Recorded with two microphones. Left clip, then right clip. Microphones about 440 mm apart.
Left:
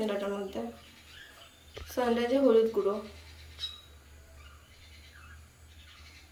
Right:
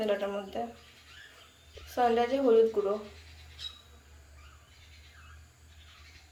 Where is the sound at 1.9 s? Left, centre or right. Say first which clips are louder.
Right 3 dB; centre.